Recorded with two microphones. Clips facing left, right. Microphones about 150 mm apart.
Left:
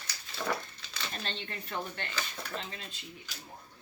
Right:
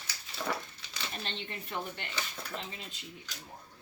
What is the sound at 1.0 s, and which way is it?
Speech, 10° right (ahead or behind).